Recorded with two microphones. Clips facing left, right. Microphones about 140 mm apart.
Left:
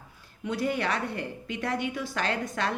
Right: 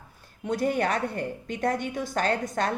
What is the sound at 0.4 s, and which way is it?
Speech, 45° right (ahead or behind).